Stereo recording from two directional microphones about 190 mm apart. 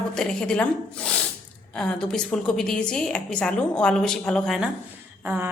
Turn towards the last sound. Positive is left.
turn(degrees=-10)  # may be behind; listen again after turning